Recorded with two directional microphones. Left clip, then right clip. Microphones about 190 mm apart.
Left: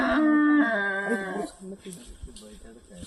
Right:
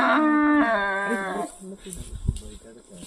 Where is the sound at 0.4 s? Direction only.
20° left (ahead or behind).